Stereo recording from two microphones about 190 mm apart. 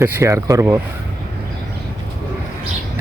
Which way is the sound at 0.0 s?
15° right (ahead or behind).